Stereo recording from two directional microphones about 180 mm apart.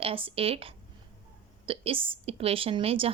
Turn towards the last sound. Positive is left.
turn(degrees=-30)  # may be behind; listen again after turning